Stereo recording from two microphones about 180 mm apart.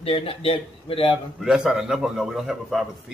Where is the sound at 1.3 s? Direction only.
5° right (ahead or behind).